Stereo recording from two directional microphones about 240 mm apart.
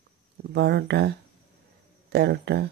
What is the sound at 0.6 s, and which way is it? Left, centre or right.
Speech, right.